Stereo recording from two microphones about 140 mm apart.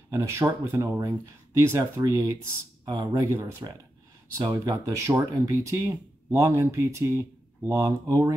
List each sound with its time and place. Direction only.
0.1 s speech: 20° right (ahead or behind)